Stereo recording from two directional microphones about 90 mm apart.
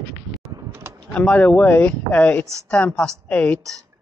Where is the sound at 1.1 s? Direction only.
15° left (ahead or behind).